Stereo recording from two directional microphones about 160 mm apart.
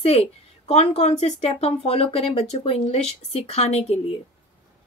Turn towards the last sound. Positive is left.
turn(degrees=40)  # may be behind; listen again after turning